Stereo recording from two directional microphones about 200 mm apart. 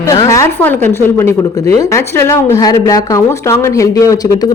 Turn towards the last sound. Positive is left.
turn(degrees=20)  # may be behind; listen again after turning